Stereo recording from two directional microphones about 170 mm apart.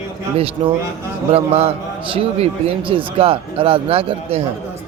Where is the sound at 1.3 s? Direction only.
35° right (ahead or behind).